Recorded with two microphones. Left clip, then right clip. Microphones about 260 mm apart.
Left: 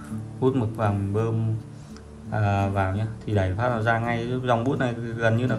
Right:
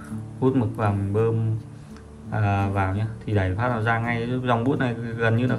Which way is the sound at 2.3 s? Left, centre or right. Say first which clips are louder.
Even; centre.